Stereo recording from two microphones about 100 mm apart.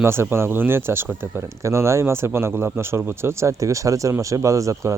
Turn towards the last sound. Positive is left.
turn(degrees=-35)  # may be behind; listen again after turning